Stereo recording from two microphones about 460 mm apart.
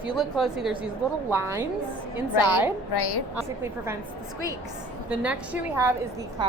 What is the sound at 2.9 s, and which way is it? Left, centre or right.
Speech, left.